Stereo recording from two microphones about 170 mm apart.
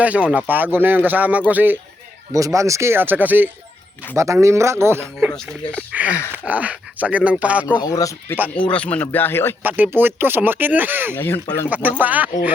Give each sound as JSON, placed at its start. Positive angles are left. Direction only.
{"t": 0.0, "sound": "speech", "side_deg": -10}
{"t": 7.7, "sound": "speech", "side_deg": 25}
{"t": 8.7, "sound": "speech", "side_deg": 5}
{"t": 9.6, "sound": "speech", "side_deg": -10}
{"t": 11.1, "sound": "speech", "side_deg": 10}
{"t": 11.7, "sound": "speech", "side_deg": -10}